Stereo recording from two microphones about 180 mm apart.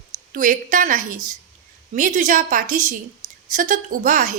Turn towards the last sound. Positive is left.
turn(degrees=-50)  # may be behind; listen again after turning